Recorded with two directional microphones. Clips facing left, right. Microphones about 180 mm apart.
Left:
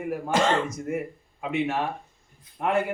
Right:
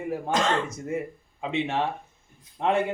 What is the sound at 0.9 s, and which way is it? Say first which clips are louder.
A man's voice: even; 25° right (ahead or behind).